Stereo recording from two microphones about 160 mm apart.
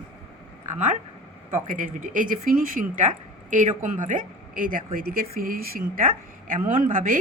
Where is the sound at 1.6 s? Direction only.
55° right (ahead or behind).